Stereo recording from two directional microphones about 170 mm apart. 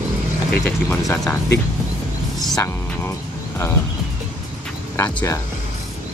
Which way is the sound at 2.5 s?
15° left (ahead or behind).